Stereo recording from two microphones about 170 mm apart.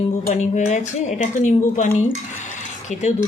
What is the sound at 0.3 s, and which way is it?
A woman's voice, 45° left (ahead or behind).